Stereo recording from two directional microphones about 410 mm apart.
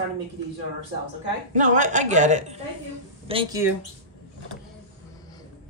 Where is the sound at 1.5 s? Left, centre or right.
Centre.